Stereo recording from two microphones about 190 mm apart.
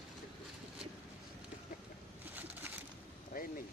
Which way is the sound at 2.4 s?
10° right (ahead or behind).